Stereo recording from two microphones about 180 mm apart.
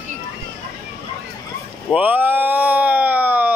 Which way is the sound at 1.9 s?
10° right (ahead or behind).